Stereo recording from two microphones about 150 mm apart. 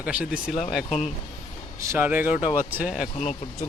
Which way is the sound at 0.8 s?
45° left (ahead or behind).